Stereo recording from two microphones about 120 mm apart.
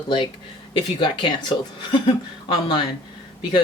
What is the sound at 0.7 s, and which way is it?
Speech, 45° left (ahead or behind).